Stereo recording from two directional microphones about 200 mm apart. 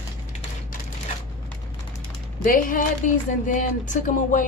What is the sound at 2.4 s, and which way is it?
Speech, 40° left (ahead or behind).